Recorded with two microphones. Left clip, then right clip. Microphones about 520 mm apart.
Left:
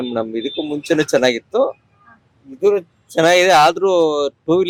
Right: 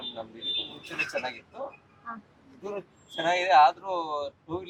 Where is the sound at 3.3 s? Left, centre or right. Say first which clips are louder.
Left 8 dB; left.